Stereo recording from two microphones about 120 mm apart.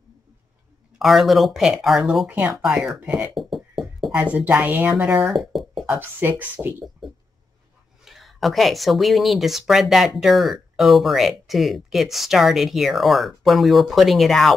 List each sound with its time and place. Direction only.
0.9 s speech: centre (ahead or behind)
3.5 s a sound: centre (ahead or behind)
4.1 s a woman's voice: 10° right (ahead or behind)
5.2 s a sound: centre (ahead or behind)
5.9 s a woman's voice: 15° right (ahead or behind)
8.0 s speech: centre (ahead or behind)